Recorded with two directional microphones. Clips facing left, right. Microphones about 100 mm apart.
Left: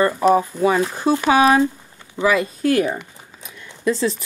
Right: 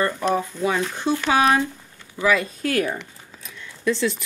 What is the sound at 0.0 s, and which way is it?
Speech, 10° left (ahead or behind).